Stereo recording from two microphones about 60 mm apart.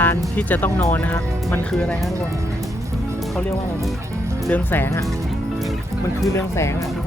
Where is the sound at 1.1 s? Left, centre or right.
Left.